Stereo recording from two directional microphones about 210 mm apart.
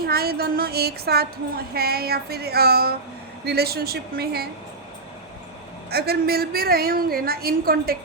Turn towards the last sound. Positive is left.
turn(degrees=-45)  # may be behind; listen again after turning